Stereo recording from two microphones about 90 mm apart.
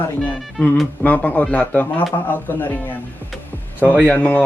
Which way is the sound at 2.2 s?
20° left (ahead or behind).